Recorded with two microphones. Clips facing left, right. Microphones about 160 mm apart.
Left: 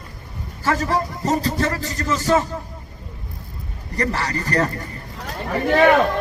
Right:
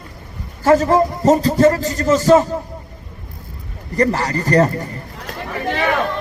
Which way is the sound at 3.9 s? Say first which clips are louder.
Right 6 dB; 35° right (ahead or behind).